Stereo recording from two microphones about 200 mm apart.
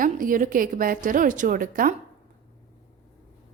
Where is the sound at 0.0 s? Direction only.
45° right (ahead or behind).